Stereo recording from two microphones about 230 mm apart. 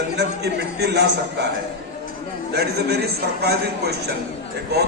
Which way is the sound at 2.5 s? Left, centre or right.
Right.